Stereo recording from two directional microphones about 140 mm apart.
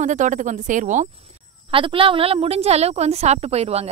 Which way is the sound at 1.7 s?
40° right (ahead or behind).